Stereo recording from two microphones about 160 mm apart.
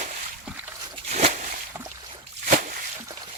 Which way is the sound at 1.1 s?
50° right (ahead or behind).